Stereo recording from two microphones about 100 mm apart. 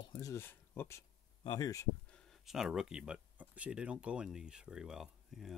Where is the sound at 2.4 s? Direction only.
5° right (ahead or behind).